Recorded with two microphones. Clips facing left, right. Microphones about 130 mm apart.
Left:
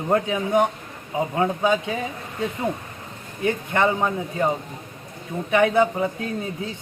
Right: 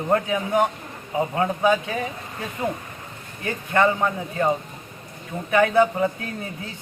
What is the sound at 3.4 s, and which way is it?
A man's voice, 20° left (ahead or behind).